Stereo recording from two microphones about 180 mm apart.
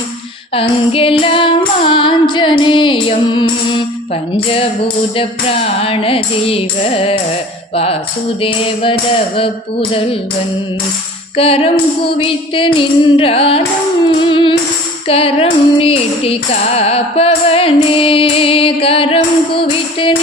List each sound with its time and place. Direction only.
0.5 s female singing: 30° left (ahead or behind)
5.1 s music: 30° left (ahead or behind)
8.4 s music: 30° left (ahead or behind)
11.3 s music: 30° left (ahead or behind)